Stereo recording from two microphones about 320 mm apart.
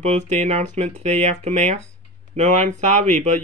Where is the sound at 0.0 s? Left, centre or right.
Right.